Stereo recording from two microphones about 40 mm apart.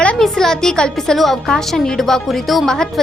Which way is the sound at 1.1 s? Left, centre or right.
Centre.